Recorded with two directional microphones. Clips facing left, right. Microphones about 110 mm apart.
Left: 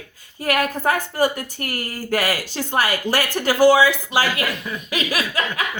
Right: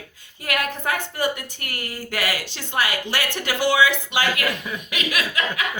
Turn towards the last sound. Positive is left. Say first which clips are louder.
# left 2 dB
turn(degrees=35)  # may be behind; listen again after turning